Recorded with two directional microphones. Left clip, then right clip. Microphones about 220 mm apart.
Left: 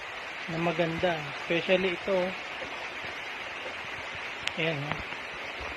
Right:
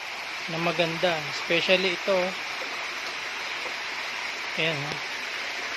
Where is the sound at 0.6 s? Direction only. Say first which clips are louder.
Right 3 dB; 5° left (ahead or behind).